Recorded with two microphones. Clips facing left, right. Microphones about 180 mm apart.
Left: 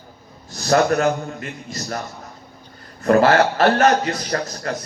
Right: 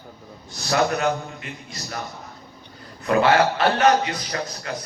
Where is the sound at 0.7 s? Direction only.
45° left (ahead or behind).